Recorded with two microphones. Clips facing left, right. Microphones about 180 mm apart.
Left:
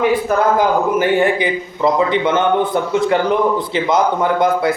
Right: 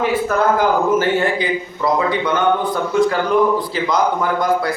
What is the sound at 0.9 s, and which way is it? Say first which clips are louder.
A man's voice: left 2 dB; 20° left (ahead or behind).